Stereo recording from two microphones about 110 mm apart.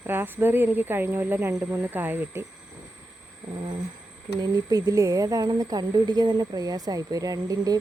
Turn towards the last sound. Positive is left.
turn(degrees=-35)  # may be behind; listen again after turning